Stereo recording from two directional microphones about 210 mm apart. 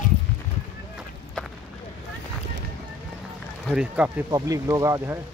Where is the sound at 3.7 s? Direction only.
5° right (ahead or behind).